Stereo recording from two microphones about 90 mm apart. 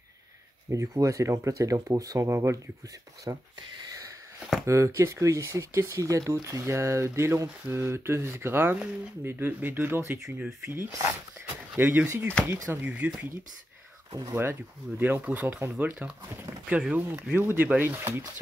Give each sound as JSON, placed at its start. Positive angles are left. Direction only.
{"t": 0.7, "sound": "speech", "side_deg": -35}
{"t": 3.8, "sound": "sniff", "side_deg": -40}
{"t": 4.6, "sound": "speech", "side_deg": -35}
{"t": 14.3, "sound": "speech", "side_deg": -25}